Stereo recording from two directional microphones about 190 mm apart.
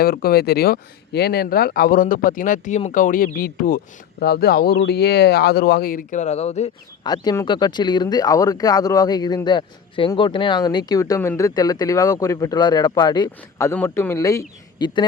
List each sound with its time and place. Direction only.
0.0 s speech: 55° left (ahead or behind); by 6.7 s 35° left (ahead or behind)
7.0 s speech: 20° left (ahead or behind)